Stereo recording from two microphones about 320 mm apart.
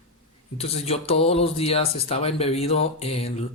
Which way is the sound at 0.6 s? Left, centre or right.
Centre.